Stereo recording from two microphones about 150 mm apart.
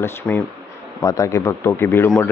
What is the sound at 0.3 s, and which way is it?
Speech, 15° left (ahead or behind).